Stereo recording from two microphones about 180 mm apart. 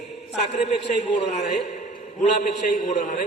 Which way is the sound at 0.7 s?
40° left (ahead or behind).